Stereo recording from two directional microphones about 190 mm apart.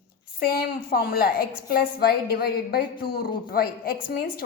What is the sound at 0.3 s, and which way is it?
A woman's voice, 50° left (ahead or behind).